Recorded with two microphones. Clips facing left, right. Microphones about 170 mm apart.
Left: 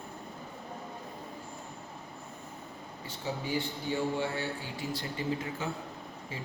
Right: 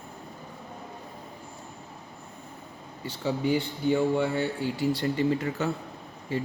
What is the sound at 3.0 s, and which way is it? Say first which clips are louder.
Speech: right 9 dB; 70° right (ahead or behind).